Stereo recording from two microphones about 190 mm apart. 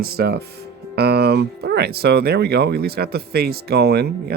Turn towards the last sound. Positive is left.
turn(degrees=-55)  # may be behind; listen again after turning